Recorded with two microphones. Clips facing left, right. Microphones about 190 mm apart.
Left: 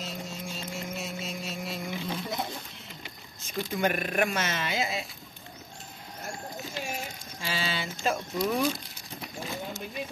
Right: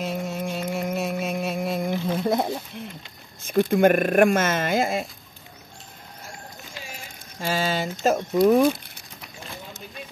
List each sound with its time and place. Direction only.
0.0 s music: 60° right (ahead or behind)
3.4 s speech: 55° right (ahead or behind)
7.3 s speech: 45° right (ahead or behind)